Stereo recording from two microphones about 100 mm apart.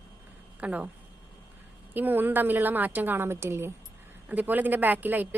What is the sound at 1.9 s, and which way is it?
A woman's voice, 20° right (ahead or behind).